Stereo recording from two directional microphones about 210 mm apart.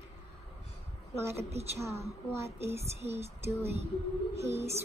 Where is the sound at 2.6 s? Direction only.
15° right (ahead or behind).